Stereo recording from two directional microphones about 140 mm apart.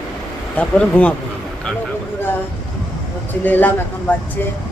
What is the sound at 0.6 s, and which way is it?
Speech, 10° left (ahead or behind).